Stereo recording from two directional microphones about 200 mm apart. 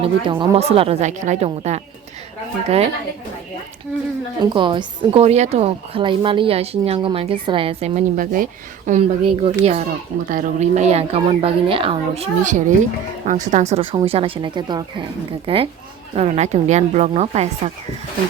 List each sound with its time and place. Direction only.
0.0 s a woman's voice: 25° right (ahead or behind)
4.4 s a woman's voice: 25° right (ahead or behind); by 8.4 s 45° right (ahead or behind)
8.9 s a woman's voice: 30° right (ahead or behind)